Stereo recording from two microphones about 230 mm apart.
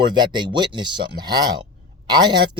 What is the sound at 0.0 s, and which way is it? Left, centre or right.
Speech, centre.